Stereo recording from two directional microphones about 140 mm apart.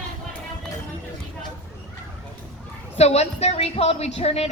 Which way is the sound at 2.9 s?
50° left (ahead or behind).